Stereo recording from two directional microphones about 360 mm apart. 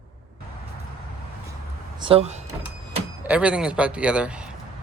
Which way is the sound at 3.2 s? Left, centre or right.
Centre.